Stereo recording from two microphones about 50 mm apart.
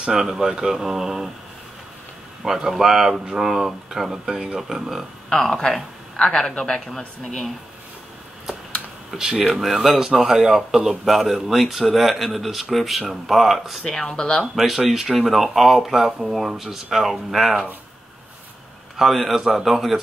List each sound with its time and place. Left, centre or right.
0.1 s speech: centre
2.4 s speech: centre
5.3 s a woman's voice: centre
7.2 s speech: centre
9.1 s speech: centre
13.8 s speech: centre
14.5 s speech: centre
18.9 s speech: centre